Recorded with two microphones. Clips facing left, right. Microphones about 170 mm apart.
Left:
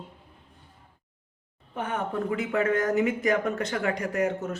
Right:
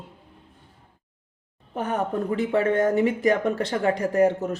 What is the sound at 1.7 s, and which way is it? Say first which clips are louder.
Speech: right 4 dB; 40° right (ahead or behind).